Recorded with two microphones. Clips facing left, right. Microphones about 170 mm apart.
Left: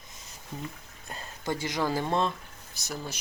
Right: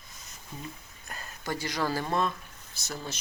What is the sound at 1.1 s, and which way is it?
Speech, 25° left (ahead or behind).